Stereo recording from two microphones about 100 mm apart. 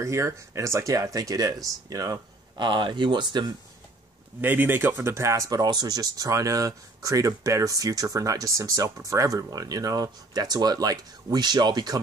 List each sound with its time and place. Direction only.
0.0 s speech: 30° right (ahead or behind); by 3.5 s 45° right (ahead or behind)
4.4 s speech: 20° right (ahead or behind); by 12.0 s 45° right (ahead or behind)